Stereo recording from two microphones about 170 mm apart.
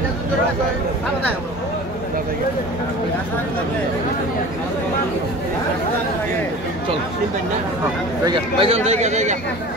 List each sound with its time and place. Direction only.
8.3 s speech: 35° right (ahead or behind)